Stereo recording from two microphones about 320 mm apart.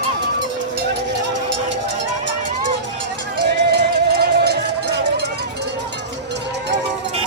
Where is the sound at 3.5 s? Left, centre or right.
Right.